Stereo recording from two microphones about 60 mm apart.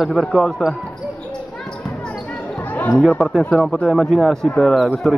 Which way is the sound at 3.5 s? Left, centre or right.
Centre.